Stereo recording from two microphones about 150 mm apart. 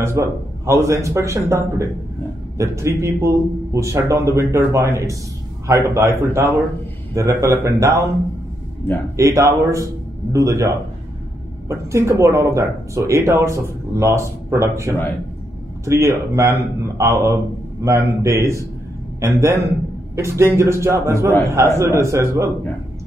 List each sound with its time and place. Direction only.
0.0 s a man's voice: 20° right (ahead or behind)
9.1 s speech: 20° right (ahead or behind)
11.7 s speech: 20° right (ahead or behind)